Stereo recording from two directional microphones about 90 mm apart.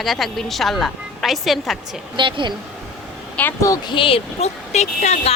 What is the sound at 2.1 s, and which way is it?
Speech, 60° right (ahead or behind).